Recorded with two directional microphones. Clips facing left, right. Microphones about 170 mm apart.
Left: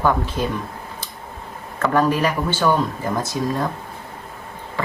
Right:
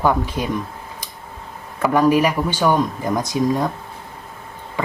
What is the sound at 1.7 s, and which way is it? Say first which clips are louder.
Speech: right 3 dB; 10° right (ahead or behind).